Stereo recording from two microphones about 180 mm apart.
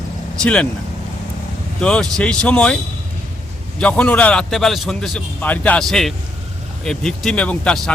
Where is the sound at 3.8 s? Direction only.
5° left (ahead or behind).